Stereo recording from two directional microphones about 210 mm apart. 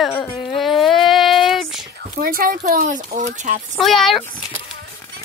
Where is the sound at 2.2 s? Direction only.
40° right (ahead or behind).